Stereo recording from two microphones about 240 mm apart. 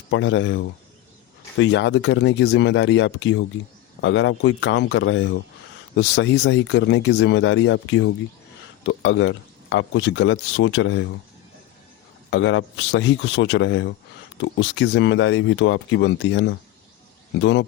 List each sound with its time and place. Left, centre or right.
0.1 s speech: left
12.3 s speech: left